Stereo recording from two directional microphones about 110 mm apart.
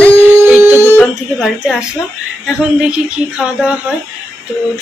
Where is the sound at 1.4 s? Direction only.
Centre (ahead or behind).